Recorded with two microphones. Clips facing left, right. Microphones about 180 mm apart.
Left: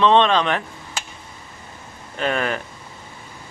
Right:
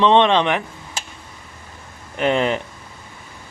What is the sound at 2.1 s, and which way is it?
Speech, 20° right (ahead or behind).